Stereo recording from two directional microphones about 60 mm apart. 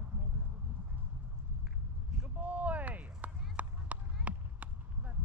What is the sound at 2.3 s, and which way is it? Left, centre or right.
Run, right.